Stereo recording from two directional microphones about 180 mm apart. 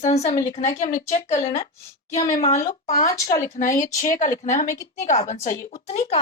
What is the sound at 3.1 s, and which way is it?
Speech, 20° left (ahead or behind).